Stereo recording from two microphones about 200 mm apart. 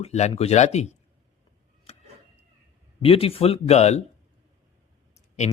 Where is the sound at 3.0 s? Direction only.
30° left (ahead or behind).